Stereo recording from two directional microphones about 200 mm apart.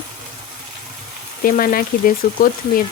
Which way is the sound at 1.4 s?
45° left (ahead or behind).